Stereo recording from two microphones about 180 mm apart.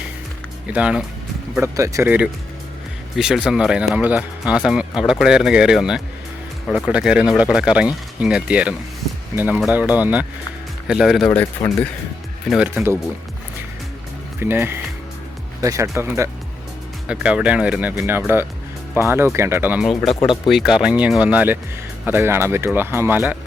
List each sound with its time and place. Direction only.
0.7 s speech: 5° right (ahead or behind)
11.3 s speech: 10° left (ahead or behind)
12.5 s speech: 5° right (ahead or behind)
14.3 s speech: 10° right (ahead or behind)
20.2 s speech: 25° left (ahead or behind)
20.5 s speech: centre (ahead or behind)